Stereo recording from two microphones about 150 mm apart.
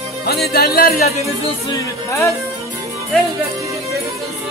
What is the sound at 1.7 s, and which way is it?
Speech, 20° left (ahead or behind).